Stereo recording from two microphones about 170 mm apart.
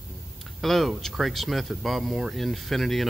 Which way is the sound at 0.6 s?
Centre (ahead or behind).